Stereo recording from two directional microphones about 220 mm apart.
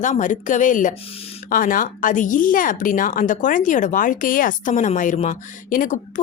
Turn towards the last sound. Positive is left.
turn(degrees=35)  # may be behind; listen again after turning